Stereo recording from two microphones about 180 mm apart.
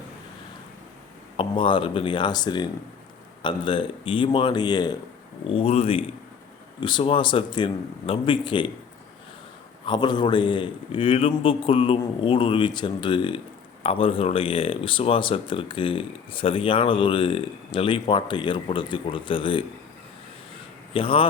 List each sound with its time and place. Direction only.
1.4 s speech: 30° left (ahead or behind)
9.8 s speech: 25° left (ahead or behind)
20.9 s speech: 30° left (ahead or behind)